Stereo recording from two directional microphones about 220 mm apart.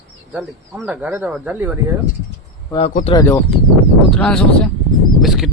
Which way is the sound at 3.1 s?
10° left (ahead or behind).